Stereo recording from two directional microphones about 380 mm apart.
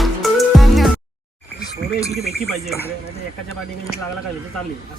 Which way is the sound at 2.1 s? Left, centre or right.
Left.